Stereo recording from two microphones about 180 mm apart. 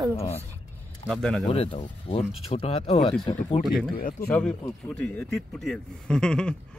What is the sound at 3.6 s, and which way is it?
Speech, centre (ahead or behind).